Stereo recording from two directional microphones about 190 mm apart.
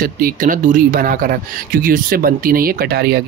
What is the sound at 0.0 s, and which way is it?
Speech, 45° right (ahead or behind).